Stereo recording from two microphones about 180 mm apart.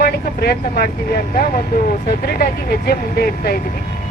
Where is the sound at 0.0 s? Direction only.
55° left (ahead or behind).